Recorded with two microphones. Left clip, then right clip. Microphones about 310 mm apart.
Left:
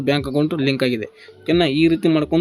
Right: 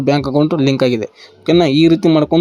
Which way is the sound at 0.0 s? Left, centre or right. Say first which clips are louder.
Right 5 dB; centre.